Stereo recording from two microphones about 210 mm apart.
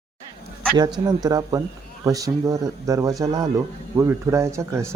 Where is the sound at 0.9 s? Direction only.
20° right (ahead or behind).